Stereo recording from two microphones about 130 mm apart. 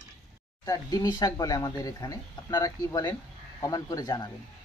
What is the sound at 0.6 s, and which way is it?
Speech, 30° left (ahead or behind).